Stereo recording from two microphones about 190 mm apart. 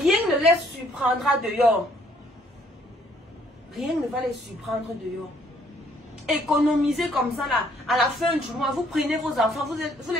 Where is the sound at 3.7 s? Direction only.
Centre (ahead or behind).